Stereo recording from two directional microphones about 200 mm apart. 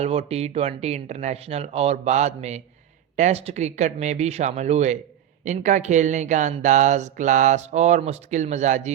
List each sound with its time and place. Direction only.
0.0 s speech: 30° right (ahead or behind)